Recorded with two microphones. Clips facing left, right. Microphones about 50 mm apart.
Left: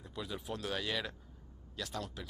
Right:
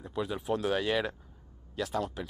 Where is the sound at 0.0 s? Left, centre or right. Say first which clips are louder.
Right 8 dB; right.